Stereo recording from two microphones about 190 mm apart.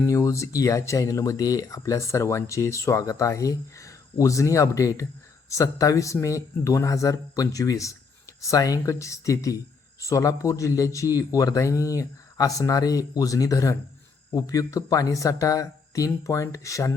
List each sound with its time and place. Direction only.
0.1 s speech: 15° left (ahead or behind)